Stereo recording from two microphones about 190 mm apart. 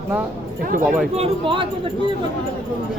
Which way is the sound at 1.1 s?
30° right (ahead or behind).